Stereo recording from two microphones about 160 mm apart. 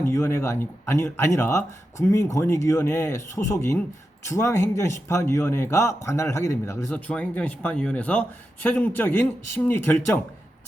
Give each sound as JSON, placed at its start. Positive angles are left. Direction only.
{"t": 0.0, "sound": "speech", "side_deg": 15}